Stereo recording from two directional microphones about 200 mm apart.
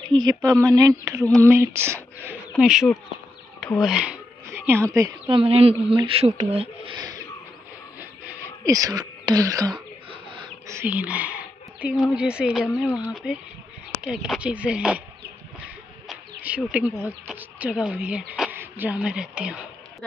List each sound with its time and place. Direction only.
0.1 s speech: 20° right (ahead or behind)
2.6 s speech: centre (ahead or behind); by 7.2 s 20° right (ahead or behind)
8.0 s a sound: 15° right (ahead or behind)
10.4 s speech: 15° right (ahead or behind)